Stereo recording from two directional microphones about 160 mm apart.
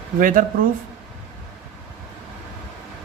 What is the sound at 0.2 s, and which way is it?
Speech, 60° right (ahead or behind).